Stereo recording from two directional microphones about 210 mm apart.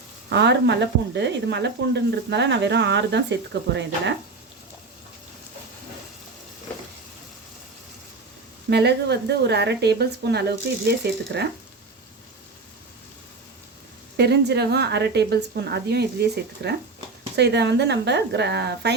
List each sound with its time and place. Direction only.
0.3 s speech: 55° right (ahead or behind)
8.7 s a woman's voice: 55° right (ahead or behind)
14.2 s a woman's voice: 55° right (ahead or behind)